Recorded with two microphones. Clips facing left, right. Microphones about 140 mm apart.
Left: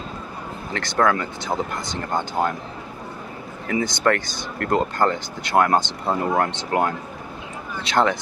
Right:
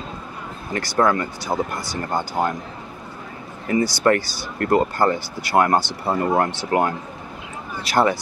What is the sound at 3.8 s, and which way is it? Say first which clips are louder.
Speech: right 4 dB; 20° left (ahead or behind).